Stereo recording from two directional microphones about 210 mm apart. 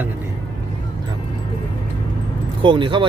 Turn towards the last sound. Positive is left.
turn(degrees=-25)  # may be behind; listen again after turning